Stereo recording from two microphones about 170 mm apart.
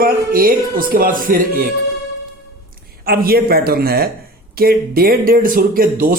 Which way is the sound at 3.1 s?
65° right (ahead or behind).